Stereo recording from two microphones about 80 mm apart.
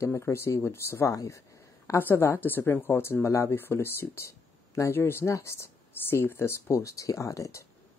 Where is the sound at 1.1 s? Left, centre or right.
Left.